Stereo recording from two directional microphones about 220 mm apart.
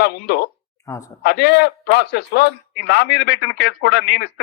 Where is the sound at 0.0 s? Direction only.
50° left (ahead or behind).